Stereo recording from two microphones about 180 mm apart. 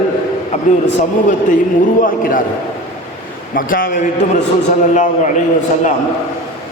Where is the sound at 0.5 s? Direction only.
35° left (ahead or behind).